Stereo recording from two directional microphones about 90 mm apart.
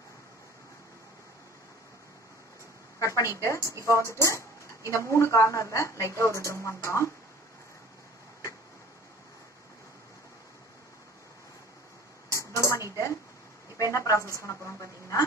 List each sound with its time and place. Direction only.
3.0 s a woman's voice: 40° left (ahead or behind)
12.5 s a sound: 35° left (ahead or behind)
13.7 s a woman's voice: 40° left (ahead or behind)